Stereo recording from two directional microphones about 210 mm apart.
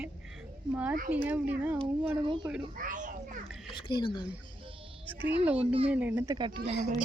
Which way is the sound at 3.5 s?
Centre (ahead or behind).